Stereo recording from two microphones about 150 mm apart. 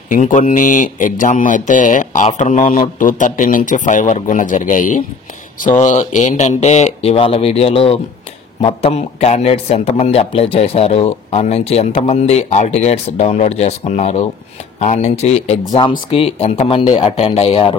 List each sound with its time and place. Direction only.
0.1 s speech: 55° left (ahead or behind); by 17.7 s 40° left (ahead or behind)